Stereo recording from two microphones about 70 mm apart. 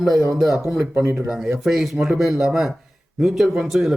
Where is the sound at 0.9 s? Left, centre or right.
Right.